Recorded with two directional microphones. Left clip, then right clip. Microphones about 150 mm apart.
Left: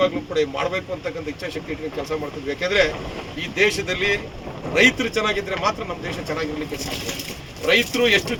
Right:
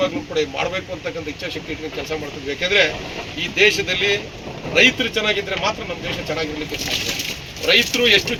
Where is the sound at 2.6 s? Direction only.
20° left (ahead or behind).